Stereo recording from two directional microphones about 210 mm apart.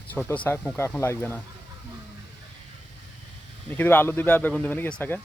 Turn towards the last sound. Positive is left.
turn(degrees=5)  # may be behind; listen again after turning